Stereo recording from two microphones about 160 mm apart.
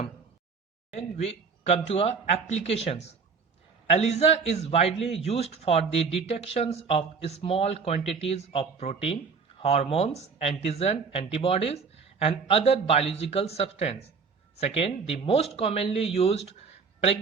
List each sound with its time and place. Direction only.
0.9 s a man's voice: 40° left (ahead or behind)